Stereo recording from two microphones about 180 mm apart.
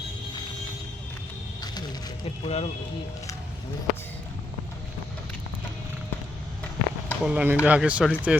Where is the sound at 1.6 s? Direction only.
20° left (ahead or behind).